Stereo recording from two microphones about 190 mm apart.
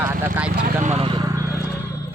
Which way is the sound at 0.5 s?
40° right (ahead or behind).